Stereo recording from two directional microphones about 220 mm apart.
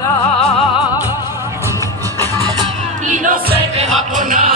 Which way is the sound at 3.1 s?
40° right (ahead or behind).